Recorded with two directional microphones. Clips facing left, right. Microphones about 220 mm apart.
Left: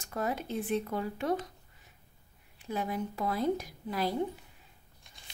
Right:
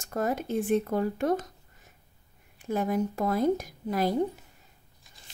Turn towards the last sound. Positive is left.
turn(degrees=-45)  # may be behind; listen again after turning